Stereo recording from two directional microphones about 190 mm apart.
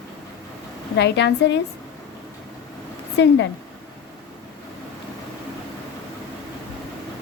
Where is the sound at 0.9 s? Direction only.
65° left (ahead or behind).